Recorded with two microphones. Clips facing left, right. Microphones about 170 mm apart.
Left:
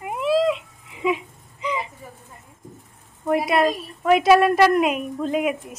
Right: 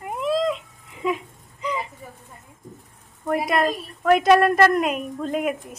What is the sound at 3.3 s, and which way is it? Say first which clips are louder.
A woman's voice: left 2 dB; centre (ahead or behind).